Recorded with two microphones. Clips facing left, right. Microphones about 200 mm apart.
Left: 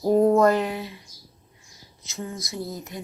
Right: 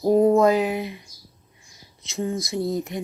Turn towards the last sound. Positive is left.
turn(degrees=-20)  # may be behind; listen again after turning